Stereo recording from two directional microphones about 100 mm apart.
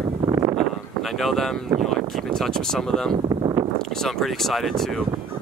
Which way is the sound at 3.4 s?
50° right (ahead or behind).